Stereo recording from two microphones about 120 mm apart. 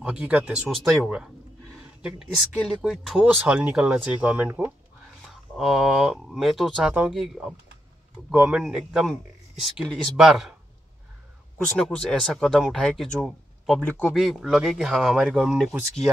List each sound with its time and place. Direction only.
0.0 s speech: 10° right (ahead or behind)
1.8 s a sound: 10° right (ahead or behind)
2.6 s speech: centre (ahead or behind)
3.3 s speech: 15° right (ahead or behind)
5.6 s speech: 5° right (ahead or behind)
11.5 s speech: 10° left (ahead or behind)
14.0 s speech: 5° right (ahead or behind)